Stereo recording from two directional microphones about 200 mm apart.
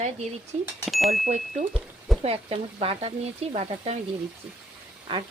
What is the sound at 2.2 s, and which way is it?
Speech, 30° right (ahead or behind).